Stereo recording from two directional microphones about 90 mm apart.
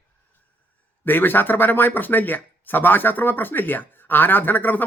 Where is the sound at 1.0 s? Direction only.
20° left (ahead or behind).